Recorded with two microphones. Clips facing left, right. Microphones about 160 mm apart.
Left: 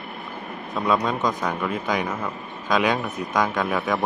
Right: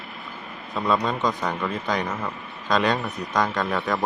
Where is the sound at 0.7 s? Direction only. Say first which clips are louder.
Left 1 dB; centre (ahead or behind).